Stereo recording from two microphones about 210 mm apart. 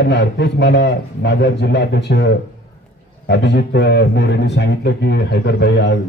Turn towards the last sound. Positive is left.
turn(degrees=55)  # may be behind; listen again after turning